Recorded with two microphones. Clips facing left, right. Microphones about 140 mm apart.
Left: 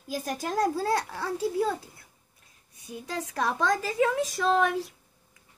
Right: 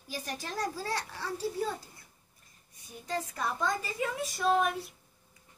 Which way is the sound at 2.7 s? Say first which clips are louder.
Left 1 dB; 75° left (ahead or behind).